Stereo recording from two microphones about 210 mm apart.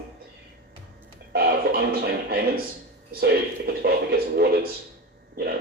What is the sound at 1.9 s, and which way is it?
Speech, 50° right (ahead or behind).